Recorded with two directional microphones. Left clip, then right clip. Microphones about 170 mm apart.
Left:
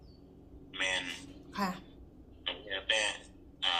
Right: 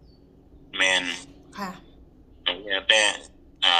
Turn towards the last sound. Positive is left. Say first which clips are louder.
# right 11 dB
turn(degrees=-75)  # may be behind; listen again after turning